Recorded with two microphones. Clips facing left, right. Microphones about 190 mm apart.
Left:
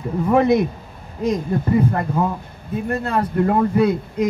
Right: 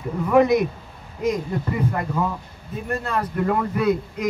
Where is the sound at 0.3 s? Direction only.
30° left (ahead or behind).